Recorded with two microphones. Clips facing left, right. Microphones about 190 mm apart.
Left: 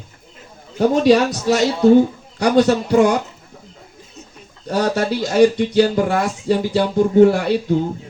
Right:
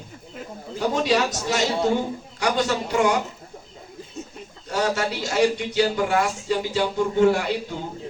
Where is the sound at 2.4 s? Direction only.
40° left (ahead or behind).